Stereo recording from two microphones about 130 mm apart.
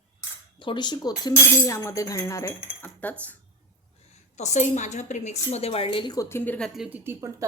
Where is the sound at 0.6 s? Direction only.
40° left (ahead or behind).